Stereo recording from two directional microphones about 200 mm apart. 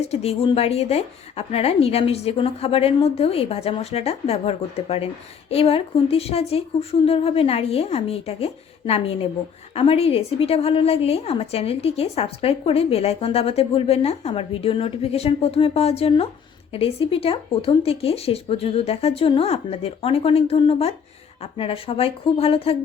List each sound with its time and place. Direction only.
0.0 s a woman's voice: 30° left (ahead or behind)